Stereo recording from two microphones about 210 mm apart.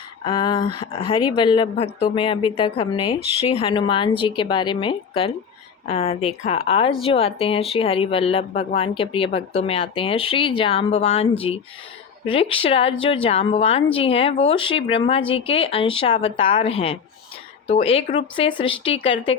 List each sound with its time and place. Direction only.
0.3 s speech: 20° left (ahead or behind)